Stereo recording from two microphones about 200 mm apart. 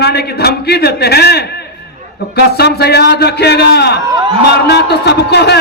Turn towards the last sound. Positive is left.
turn(degrees=55)  # may be behind; listen again after turning